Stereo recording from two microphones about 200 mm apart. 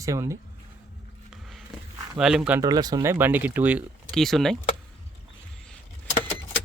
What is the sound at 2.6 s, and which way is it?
Speech, 20° right (ahead or behind).